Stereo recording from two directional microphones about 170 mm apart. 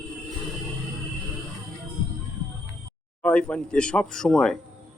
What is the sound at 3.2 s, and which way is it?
A man's voice, 5° left (ahead or behind).